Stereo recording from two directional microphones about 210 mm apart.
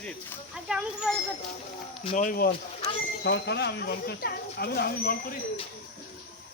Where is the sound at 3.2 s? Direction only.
55° left (ahead or behind).